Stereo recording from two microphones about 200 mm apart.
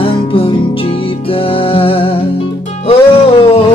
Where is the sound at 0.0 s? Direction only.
25° left (ahead or behind).